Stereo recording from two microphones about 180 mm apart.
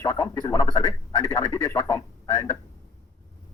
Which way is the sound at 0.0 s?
15° left (ahead or behind).